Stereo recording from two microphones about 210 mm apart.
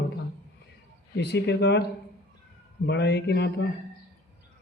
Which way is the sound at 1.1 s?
50° left (ahead or behind).